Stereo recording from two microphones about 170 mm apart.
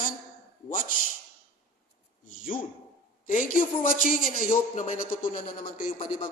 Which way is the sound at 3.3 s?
50° left (ahead or behind).